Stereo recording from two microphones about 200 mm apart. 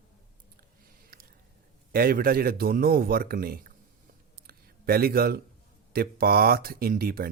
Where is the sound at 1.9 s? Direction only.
45° right (ahead or behind).